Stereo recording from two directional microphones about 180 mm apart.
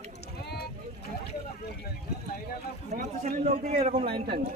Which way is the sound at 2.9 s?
40° right (ahead or behind).